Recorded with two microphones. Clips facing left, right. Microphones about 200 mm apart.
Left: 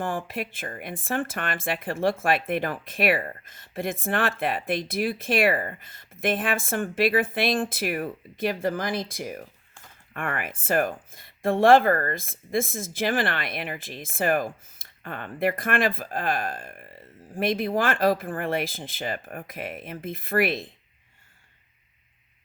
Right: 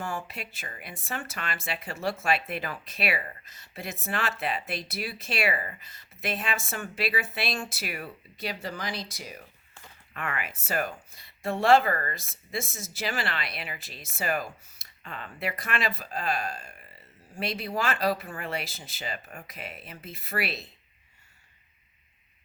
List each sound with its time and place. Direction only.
0.0 s speech: 50° left (ahead or behind)